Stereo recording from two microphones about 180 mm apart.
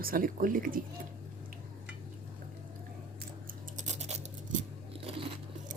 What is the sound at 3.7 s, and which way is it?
Scratch, 40° right (ahead or behind).